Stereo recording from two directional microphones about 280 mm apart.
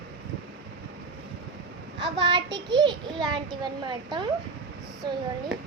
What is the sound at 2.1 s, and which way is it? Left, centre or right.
Child singing, centre.